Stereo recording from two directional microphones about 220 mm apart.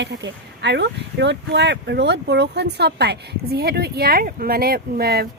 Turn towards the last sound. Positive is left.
turn(degrees=-45)  # may be behind; listen again after turning